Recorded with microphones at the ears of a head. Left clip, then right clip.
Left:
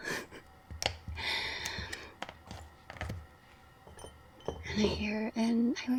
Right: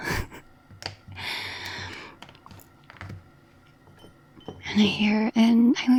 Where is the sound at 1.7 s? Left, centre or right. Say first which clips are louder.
Right 5 dB; right.